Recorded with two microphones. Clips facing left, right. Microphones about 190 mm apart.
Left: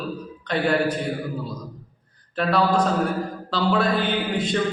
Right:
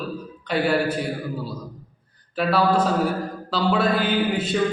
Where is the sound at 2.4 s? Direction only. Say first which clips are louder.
Right 1 dB; 5° right (ahead or behind).